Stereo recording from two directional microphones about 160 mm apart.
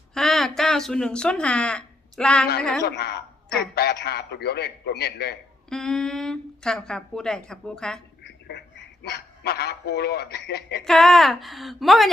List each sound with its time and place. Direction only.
0.1 s speech: centre (ahead or behind)
2.8 s a man's voice: 90° left
5.6 s a woman's voice: 5° left (ahead or behind)
8.2 s duck: 90° left
9.0 s a man's voice: 85° left
10.8 s a woman's voice: centre (ahead or behind)